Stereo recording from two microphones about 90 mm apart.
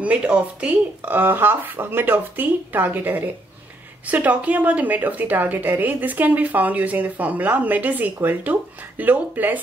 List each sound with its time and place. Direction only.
0.0 s a woman's voice: 15° right (ahead or behind)